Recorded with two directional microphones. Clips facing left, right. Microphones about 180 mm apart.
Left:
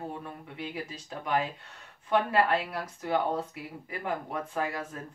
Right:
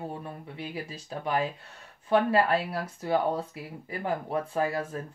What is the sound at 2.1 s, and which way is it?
Speech, 35° right (ahead or behind).